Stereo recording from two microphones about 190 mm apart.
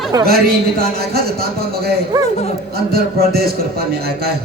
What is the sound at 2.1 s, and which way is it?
Speech, 20° right (ahead or behind).